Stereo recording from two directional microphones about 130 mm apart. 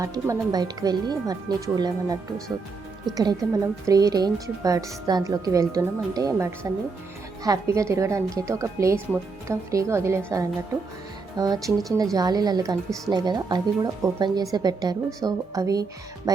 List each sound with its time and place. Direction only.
0.0 s speech: 25° right (ahead or behind)
3.2 s speech: 25° right (ahead or behind)
11.3 s speech: 30° right (ahead or behind)